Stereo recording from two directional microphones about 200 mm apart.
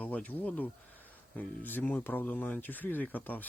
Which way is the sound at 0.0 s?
5° left (ahead or behind).